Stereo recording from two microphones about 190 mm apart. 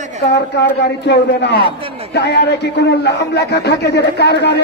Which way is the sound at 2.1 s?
60° left (ahead or behind).